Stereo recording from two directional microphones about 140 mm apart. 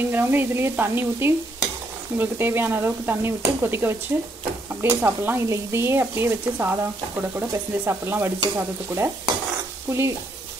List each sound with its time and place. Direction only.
0.1 s stir: 15° right (ahead or behind)